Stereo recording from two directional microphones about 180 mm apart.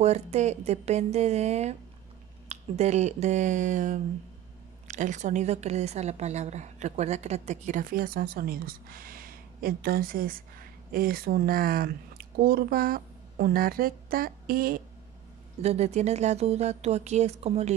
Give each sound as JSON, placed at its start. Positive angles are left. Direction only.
{"t": 0.0, "sound": "a woman's voice", "side_deg": -35}
{"t": 15.6, "sound": "speech", "side_deg": -35}